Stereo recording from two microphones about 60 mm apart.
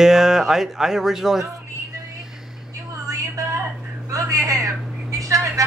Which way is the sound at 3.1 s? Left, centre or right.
Right.